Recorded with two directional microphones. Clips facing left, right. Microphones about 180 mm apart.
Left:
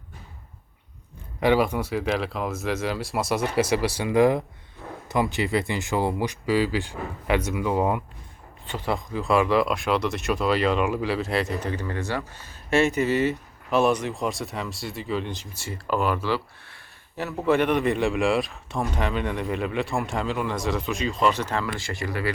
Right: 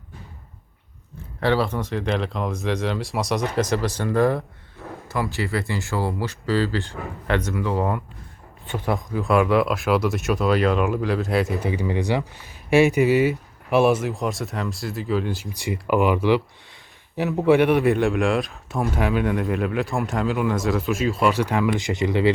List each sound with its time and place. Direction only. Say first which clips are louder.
1.4 s speech: left 1 dB; 15° left (ahead or behind)
8.9 s speech: right 2 dB; centre (ahead or behind)
15.5 s speech: right 6 dB; 15° right (ahead or behind)